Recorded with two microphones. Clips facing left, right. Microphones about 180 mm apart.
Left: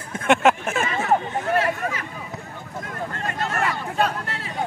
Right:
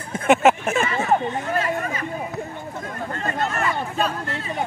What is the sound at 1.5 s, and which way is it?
Chatter, 75° left (ahead or behind).